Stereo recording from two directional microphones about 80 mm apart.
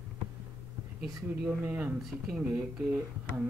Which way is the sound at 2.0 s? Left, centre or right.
Centre.